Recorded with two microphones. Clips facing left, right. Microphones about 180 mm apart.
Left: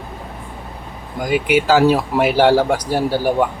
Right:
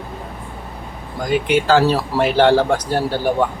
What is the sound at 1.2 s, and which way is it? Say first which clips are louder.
Speech: left 1 dB; 10° left (ahead or behind).